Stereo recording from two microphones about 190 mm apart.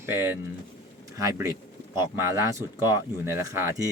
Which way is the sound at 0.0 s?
10° right (ahead or behind).